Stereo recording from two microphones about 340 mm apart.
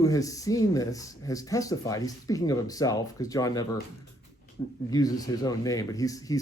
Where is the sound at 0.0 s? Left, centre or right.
Centre.